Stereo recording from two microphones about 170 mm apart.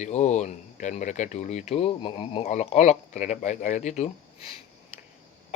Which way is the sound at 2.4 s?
45° left (ahead or behind).